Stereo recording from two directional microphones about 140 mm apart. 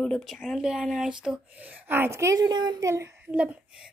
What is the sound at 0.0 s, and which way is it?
Speech, centre (ahead or behind).